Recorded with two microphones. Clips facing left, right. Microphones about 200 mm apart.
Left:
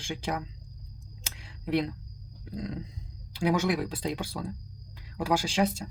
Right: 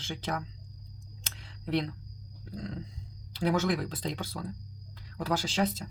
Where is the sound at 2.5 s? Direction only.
15° left (ahead or behind).